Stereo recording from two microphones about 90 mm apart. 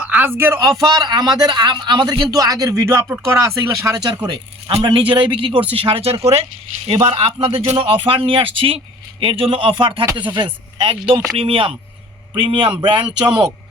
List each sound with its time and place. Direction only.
0.0 s speech: 15° right (ahead or behind)
0.8 s a man's voice: 40° right (ahead or behind)
4.8 s speech: 70° right (ahead or behind)
5.7 s speech: 85° right; by 11.1 s 70° right (ahead or behind)
11.3 s speech: 90° right
12.3 s speech: 70° right (ahead or behind)
13.2 s speech: 10° right (ahead or behind)